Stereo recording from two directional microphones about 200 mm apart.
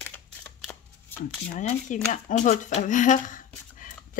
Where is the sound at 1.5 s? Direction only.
40° left (ahead or behind).